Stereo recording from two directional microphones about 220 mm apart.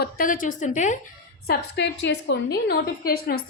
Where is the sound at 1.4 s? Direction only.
50° left (ahead or behind).